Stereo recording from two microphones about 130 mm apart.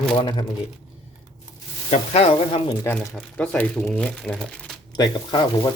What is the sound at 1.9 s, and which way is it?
Speech, 50° left (ahead or behind).